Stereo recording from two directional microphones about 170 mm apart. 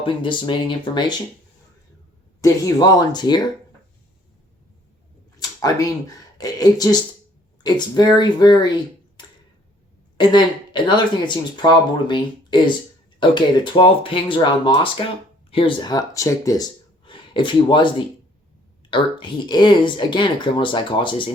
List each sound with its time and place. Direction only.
0.0 s speech: 30° left (ahead or behind)
2.4 s speech: 20° left (ahead or behind)
5.4 s speech: 20° left (ahead or behind)
10.2 s speech: 25° left (ahead or behind)